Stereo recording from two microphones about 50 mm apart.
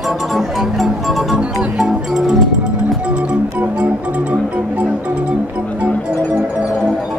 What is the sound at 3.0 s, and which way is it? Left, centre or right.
Music, right.